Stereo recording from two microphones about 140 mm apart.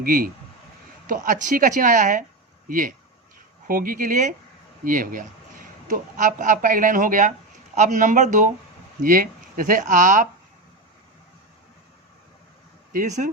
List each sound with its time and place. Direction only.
0.0 s speech: 90° right; by 2.2 s 65° right (ahead or behind)
2.6 s speech: 75° right (ahead or behind)
3.7 s a man's voice: 90° right; by 8.4 s 60° right (ahead or behind)
9.0 s speech: 85° right; by 10.2 s 70° right (ahead or behind)
12.9 s a man's voice: 65° right (ahead or behind)